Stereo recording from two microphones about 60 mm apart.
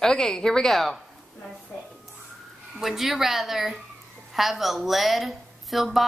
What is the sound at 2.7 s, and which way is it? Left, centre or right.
A woman's voice, centre.